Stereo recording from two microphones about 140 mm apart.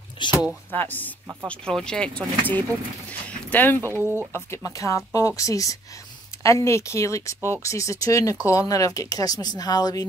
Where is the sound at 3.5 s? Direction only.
15° left (ahead or behind).